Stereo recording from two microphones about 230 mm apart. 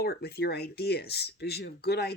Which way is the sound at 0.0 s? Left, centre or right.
Left.